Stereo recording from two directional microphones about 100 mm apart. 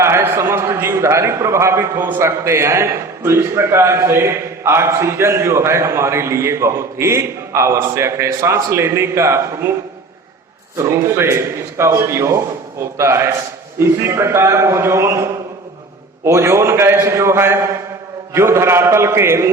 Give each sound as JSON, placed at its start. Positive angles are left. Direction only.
{"t": 0.0, "sound": "a man's voice", "side_deg": -25}
{"t": 10.8, "sound": "a man's voice", "side_deg": -25}